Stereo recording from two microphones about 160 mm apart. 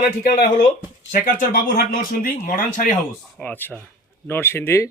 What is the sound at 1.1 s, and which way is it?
Speech, 55° left (ahead or behind).